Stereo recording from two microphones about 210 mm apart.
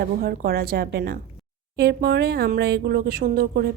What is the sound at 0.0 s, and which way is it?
A woman's voice, 45° right (ahead or behind).